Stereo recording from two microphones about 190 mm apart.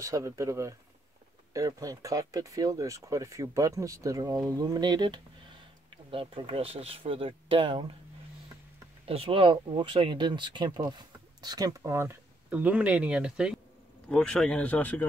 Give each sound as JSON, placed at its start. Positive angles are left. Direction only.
{"t": 0.0, "sound": "speech", "side_deg": -15}
{"t": 9.0, "sound": "speech", "side_deg": -30}